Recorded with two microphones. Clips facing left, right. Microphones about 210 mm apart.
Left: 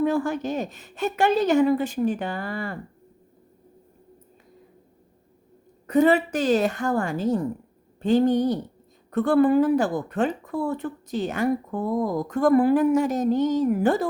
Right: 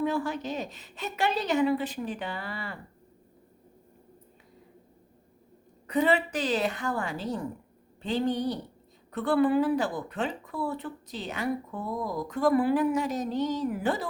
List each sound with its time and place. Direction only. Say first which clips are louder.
0.0 s speech: left 6 dB; 50° left (ahead or behind)
5.9 s speech: left 6 dB; 45° left (ahead or behind)